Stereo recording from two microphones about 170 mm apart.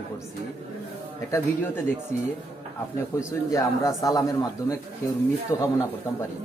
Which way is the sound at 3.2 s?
20° left (ahead or behind).